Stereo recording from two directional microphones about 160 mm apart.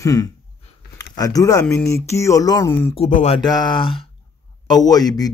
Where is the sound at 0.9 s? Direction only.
20° left (ahead or behind).